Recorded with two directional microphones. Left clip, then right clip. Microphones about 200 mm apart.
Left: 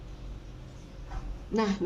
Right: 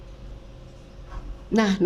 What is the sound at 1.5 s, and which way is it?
Speech, 50° right (ahead or behind).